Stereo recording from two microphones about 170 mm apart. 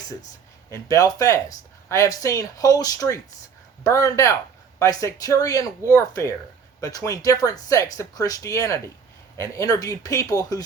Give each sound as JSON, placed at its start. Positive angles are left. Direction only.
{"t": 0.7, "sound": "speech", "side_deg": 20}